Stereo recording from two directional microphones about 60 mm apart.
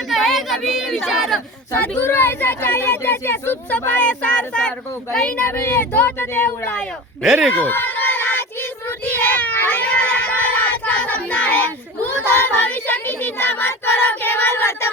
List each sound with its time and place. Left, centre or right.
0.1 s chatter: centre
2.0 s speech: left
3.7 s speech: left
5.5 s speech: left
7.5 s a sound: left
12.0 s child singing: left